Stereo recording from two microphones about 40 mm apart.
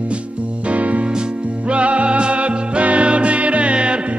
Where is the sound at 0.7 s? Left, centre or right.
Right.